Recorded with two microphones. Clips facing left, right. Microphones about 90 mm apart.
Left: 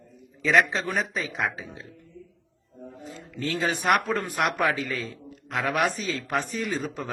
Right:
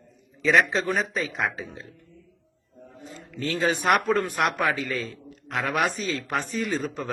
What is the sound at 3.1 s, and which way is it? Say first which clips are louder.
A man's voice: right 1 dB; centre (ahead or behind).